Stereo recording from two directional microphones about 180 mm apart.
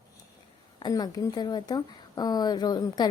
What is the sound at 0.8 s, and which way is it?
A woman's voice, 20° left (ahead or behind).